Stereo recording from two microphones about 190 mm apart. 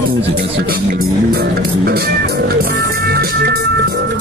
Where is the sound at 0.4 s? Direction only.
50° right (ahead or behind).